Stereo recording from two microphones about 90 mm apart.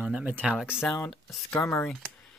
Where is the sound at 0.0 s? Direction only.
15° right (ahead or behind); by 1.4 s 5° left (ahead or behind).